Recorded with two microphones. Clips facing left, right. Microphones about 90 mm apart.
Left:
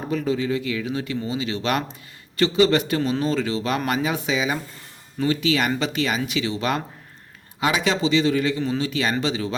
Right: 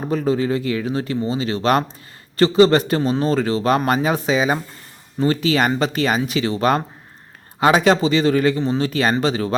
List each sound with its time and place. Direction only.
0.1 s speech: 40° right (ahead or behind)